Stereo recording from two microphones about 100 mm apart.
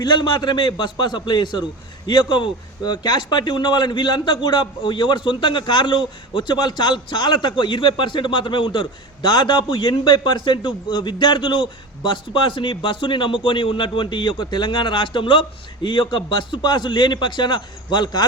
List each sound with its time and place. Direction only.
0.0 s a man's voice: 45° left (ahead or behind)